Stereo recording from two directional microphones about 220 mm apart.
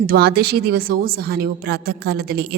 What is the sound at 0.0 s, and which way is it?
A woman's voice, 45° right (ahead or behind).